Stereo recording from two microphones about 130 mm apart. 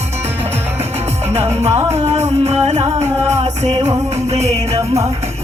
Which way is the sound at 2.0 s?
55° right (ahead or behind).